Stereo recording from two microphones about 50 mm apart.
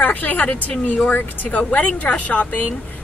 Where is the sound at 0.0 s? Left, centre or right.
Left.